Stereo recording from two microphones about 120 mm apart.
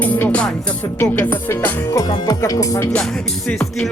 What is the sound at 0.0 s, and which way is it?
Music, 15° left (ahead or behind).